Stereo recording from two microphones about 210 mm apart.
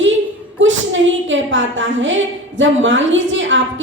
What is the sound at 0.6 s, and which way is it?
A woman's voice, 65° right (ahead or behind).